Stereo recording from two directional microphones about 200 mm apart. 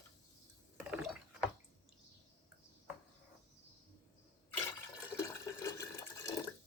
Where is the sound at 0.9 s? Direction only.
5° right (ahead or behind).